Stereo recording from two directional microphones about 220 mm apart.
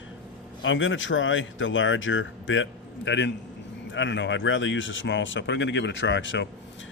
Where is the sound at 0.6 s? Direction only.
60° left (ahead or behind).